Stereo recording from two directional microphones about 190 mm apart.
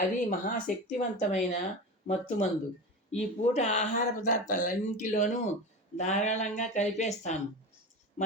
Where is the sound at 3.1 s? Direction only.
35° left (ahead or behind).